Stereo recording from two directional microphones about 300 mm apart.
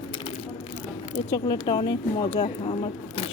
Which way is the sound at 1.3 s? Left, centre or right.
Centre.